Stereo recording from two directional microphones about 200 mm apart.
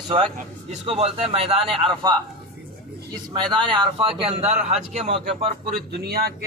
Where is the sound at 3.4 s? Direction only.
5° left (ahead or behind).